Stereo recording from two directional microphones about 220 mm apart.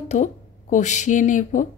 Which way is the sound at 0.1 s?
35° left (ahead or behind).